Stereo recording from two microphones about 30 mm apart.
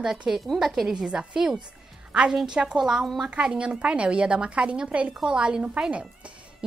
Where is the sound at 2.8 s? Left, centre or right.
Centre.